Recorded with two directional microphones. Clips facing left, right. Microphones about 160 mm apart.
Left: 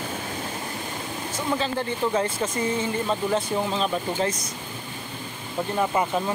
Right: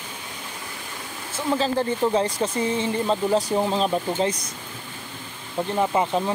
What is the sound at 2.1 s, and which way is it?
Speech, 35° right (ahead or behind).